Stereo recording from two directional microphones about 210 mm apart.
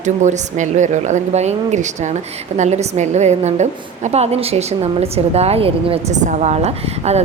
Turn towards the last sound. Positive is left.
turn(degrees=-30)  # may be behind; listen again after turning